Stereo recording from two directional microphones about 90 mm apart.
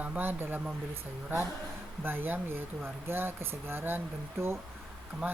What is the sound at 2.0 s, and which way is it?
Speech, 25° right (ahead or behind).